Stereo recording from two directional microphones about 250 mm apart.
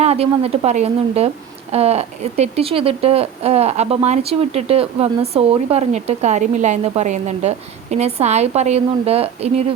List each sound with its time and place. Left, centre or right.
0.0 s a woman's voice: right